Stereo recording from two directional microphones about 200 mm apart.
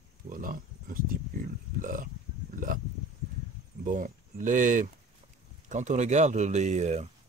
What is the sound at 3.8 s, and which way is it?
Speech, 40° right (ahead or behind).